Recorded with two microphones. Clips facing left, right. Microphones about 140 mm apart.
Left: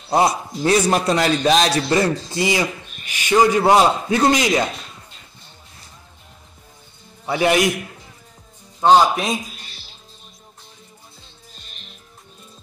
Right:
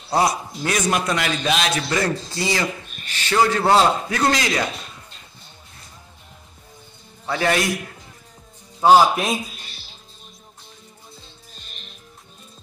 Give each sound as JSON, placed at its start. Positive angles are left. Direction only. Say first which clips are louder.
{"t": 0.1, "sound": "a man's voice", "louder": "left 3 dB", "side_deg": 25}
{"t": 2.0, "sound": "a man's voice", "louder": "left 3 dB", "side_deg": 15}
{"t": 7.2, "sound": "a man's voice", "louder": "left 4 dB", "side_deg": 15}
{"t": 8.8, "sound": "a man's voice", "louder": "even", "side_deg": -5}